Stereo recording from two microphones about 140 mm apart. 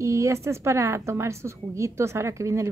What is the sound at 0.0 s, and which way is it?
Speech, 20° right (ahead or behind).